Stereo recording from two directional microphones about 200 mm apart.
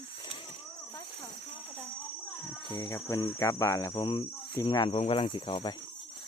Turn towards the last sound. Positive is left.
turn(degrees=25)  # may be behind; listen again after turning